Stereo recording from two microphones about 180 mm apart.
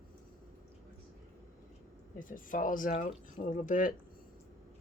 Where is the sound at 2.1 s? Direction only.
50° left (ahead or behind).